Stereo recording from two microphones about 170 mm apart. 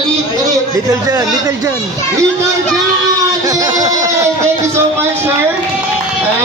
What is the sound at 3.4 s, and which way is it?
Speech, 20° right (ahead or behind).